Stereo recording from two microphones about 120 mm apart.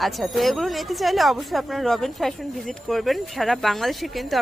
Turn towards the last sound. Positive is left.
turn(degrees=0)  # may be behind; listen again after turning